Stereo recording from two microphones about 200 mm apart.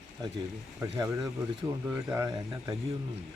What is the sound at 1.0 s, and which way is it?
Speech, 15° right (ahead or behind).